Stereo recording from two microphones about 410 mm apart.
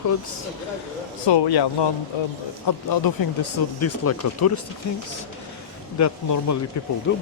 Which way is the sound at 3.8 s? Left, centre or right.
Left.